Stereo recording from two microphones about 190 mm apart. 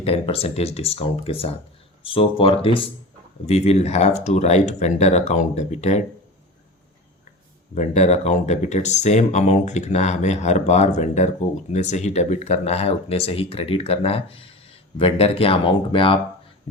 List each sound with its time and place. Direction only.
0.0 s speech: 30° left (ahead or behind)
7.8 s speech: 35° left (ahead or behind)